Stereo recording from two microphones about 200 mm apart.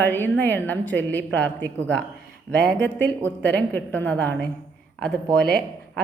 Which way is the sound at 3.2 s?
10° left (ahead or behind).